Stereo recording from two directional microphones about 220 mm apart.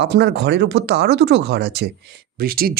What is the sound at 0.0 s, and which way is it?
Speech, 50° right (ahead or behind).